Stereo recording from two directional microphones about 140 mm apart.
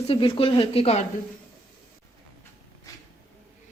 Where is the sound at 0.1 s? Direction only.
40° left (ahead or behind).